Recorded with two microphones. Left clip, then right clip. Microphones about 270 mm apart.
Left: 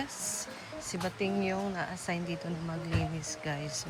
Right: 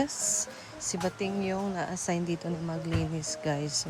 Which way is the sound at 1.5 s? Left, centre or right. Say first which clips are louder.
Right 2 dB; centre.